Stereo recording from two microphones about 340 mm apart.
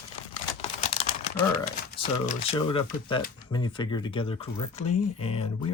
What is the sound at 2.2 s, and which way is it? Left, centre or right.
Speech, centre.